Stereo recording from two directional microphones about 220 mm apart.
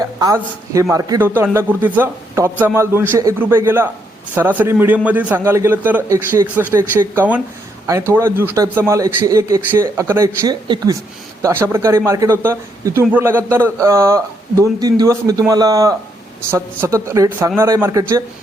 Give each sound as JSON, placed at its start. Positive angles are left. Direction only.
{"t": 0.0, "sound": "a man's voice", "side_deg": -15}